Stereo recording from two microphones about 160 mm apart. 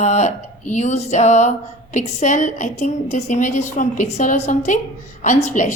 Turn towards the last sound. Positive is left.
turn(degrees=50)  # may be behind; listen again after turning